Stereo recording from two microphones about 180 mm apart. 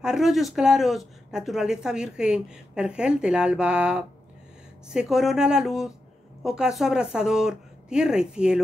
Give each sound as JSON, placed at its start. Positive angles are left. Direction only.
{"t": 0.0, "sound": "speech", "side_deg": 0}